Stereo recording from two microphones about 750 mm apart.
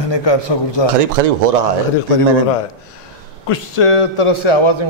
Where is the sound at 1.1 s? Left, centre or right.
Right.